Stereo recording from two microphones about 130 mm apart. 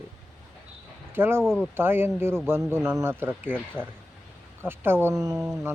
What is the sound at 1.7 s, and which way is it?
Speech, 15° right (ahead or behind).